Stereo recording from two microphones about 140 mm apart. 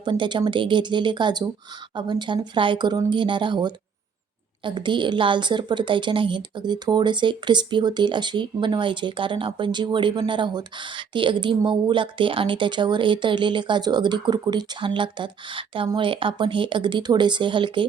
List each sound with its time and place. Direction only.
0.0 s a woman's voice: 35° right (ahead or behind)